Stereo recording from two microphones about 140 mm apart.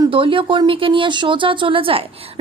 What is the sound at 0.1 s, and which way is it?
Speech, 40° right (ahead or behind).